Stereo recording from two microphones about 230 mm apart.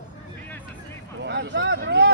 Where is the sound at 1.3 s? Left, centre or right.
Right.